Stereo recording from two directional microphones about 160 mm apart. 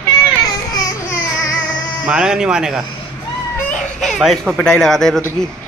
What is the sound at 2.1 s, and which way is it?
Speech, 5° right (ahead or behind).